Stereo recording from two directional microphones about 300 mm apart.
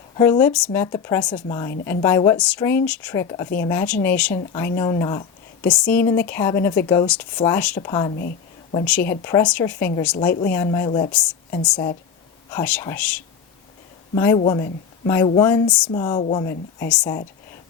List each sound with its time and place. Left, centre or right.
0.2 s speech: centre
5.6 s speech: centre
11.1 s speech: centre
14.3 s speech: centre